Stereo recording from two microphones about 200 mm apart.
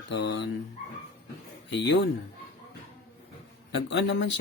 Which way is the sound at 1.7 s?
60° left (ahead or behind).